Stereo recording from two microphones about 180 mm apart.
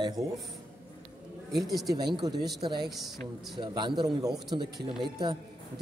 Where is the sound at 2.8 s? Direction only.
Centre (ahead or behind).